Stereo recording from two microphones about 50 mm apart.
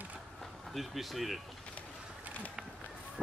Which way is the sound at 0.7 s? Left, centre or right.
Centre.